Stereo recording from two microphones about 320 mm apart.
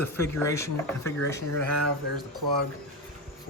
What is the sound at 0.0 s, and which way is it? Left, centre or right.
Speech, centre.